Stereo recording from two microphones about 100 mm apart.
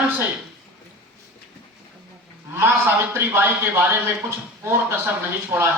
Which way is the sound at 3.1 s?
20° right (ahead or behind).